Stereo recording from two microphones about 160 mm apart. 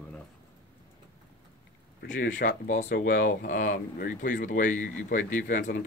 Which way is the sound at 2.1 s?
55° left (ahead or behind).